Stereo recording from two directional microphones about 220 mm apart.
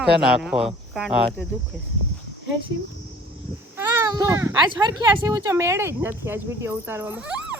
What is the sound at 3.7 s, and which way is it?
Speech, 10° right (ahead or behind).